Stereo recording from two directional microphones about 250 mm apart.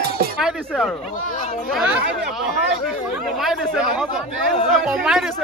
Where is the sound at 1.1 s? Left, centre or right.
Left.